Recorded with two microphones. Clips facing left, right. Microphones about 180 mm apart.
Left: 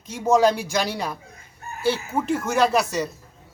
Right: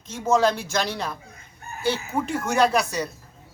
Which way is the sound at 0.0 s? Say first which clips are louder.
Left 2 dB; 10° left (ahead or behind).